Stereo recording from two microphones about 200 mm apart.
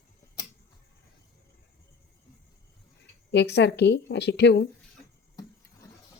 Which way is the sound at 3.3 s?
55° left (ahead or behind).